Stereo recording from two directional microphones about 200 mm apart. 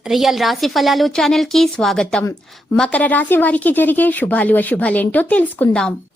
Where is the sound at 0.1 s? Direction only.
Centre (ahead or behind).